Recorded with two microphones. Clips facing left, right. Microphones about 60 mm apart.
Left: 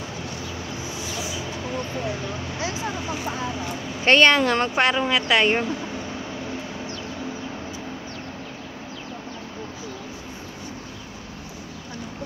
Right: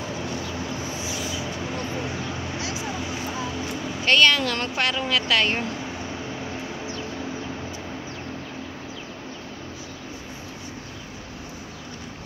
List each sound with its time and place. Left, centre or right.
4.0 s speech: left